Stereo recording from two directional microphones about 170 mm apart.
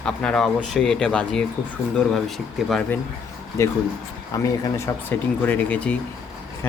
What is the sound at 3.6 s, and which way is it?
Speech, 15° left (ahead or behind).